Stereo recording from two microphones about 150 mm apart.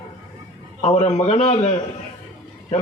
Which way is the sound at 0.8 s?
50° left (ahead or behind).